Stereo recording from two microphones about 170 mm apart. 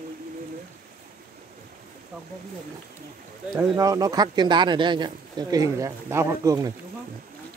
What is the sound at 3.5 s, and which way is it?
Speech, 20° right (ahead or behind).